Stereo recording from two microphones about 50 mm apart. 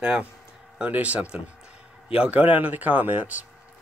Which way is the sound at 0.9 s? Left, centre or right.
Right.